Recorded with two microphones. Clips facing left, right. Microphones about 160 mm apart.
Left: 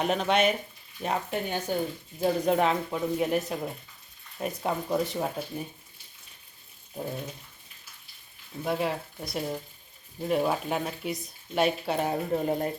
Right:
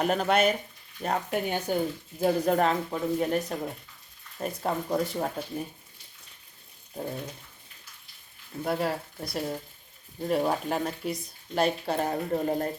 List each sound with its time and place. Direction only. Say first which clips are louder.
0.0 s speech: right 1 dB; centre (ahead or behind)
6.9 s speech: even; centre (ahead or behind)
8.6 s speech: even; centre (ahead or behind)